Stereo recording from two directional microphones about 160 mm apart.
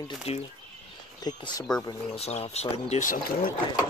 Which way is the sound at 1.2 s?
25° left (ahead or behind).